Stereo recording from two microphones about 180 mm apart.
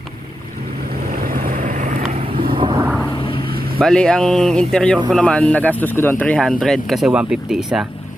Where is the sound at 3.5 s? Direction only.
55° right (ahead or behind).